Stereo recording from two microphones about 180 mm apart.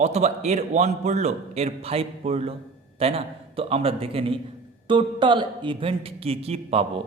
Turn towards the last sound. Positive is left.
turn(degrees=-35)  # may be behind; listen again after turning